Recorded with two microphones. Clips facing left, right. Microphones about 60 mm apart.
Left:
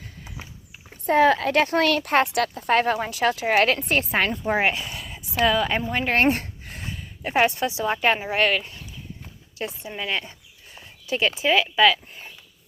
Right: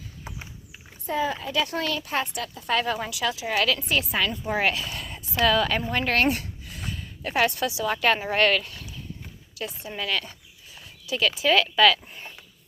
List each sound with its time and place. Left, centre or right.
1.0 s speech: left
1.6 s speech: left
2.6 s speech: left
4.6 s a woman's voice: left
4.9 s a sound: centre
5.3 s a woman's voice: centre
6.1 s a sound: left
6.9 s a woman's voice: centre
7.9 s speech: centre
9.6 s a woman's voice: left
10.8 s a sound: left
11.4 s speech: centre